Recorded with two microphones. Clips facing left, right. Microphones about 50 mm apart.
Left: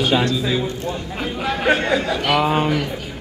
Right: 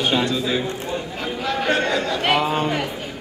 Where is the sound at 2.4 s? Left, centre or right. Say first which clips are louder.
Left 3 dB; centre.